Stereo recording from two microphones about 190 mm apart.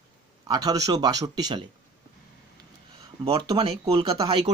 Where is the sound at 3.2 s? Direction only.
25° right (ahead or behind).